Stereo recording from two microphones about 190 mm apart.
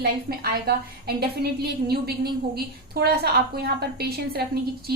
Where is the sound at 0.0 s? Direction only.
55° right (ahead or behind).